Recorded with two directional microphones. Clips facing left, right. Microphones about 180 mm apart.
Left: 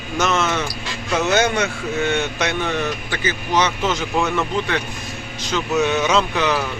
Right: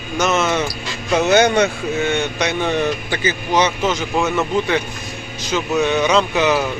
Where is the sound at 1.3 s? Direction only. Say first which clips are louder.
Right 5 dB; 15° right (ahead or behind).